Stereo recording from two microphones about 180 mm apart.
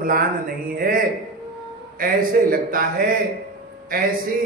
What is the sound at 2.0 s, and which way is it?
Speech, 50° right (ahead or behind).